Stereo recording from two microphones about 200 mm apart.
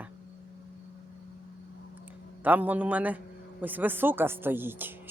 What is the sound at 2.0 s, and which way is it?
A man's voice, 10° right (ahead or behind).